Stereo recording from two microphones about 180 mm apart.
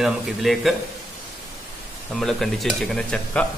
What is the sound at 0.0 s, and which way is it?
Speech, centre (ahead or behind).